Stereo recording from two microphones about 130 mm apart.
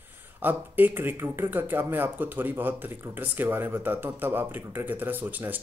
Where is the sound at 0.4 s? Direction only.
15° right (ahead or behind).